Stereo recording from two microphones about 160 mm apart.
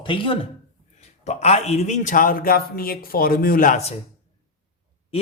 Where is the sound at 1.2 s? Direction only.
45° left (ahead or behind); by 3.8 s 60° left (ahead or behind).